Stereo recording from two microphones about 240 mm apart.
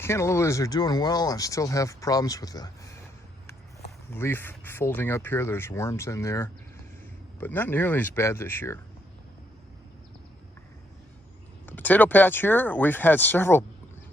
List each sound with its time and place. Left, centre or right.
0.0 s speech: centre
4.1 s speech: centre
11.6 s speech: centre